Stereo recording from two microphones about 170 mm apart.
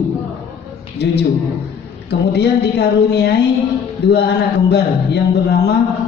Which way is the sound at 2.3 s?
85° left.